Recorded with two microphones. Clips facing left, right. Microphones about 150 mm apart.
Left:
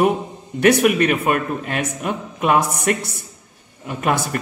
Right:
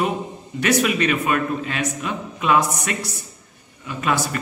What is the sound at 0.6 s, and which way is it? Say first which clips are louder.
A man's voice: left 5 dB; 55° left (ahead or behind).